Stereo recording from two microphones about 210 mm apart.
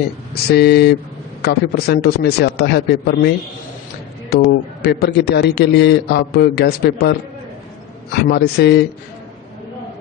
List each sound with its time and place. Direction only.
0.5 s a man's voice: 50° left (ahead or behind)